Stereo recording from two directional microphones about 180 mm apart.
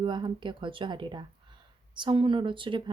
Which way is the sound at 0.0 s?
25° right (ahead or behind).